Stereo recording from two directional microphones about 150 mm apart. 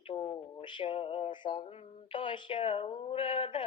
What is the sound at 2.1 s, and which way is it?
Speech, 30° left (ahead or behind).